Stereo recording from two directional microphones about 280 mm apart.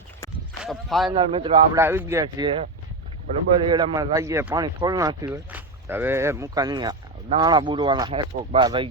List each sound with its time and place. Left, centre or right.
0.6 s speech: centre
1.1 s speech: centre